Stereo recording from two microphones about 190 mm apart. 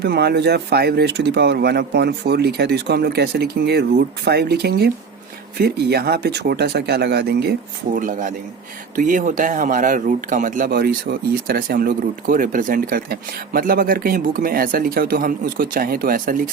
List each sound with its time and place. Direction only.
0.0 s speech: 55° right (ahead or behind)
7.9 s speech: 45° right (ahead or behind)
10.7 s speech: 55° right (ahead or behind)